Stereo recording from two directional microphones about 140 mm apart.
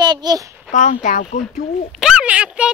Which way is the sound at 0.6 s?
60° left (ahead or behind).